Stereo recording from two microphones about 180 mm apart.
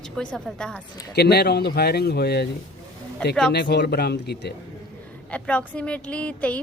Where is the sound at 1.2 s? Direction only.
65° left (ahead or behind).